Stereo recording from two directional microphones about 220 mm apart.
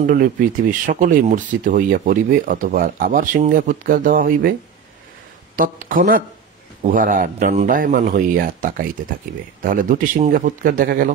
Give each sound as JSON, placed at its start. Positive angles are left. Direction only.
{"t": 0.0, "sound": "speech", "side_deg": -40}
{"t": 5.6, "sound": "speech", "side_deg": -35}